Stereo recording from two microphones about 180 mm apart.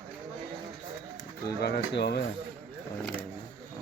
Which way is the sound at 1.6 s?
65° left (ahead or behind).